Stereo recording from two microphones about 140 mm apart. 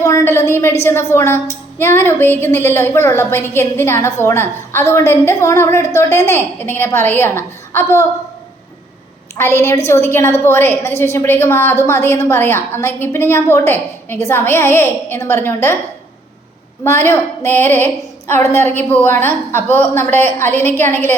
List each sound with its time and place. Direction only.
0.0 s a woman's voice: 20° left (ahead or behind)
9.3 s a woman's voice: 20° left (ahead or behind)
16.8 s a woman's voice: 15° left (ahead or behind)